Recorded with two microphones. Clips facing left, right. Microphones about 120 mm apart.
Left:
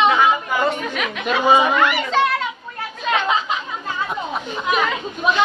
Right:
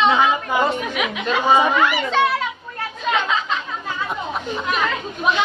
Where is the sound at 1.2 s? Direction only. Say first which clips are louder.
Left 1 dB; 10° left (ahead or behind).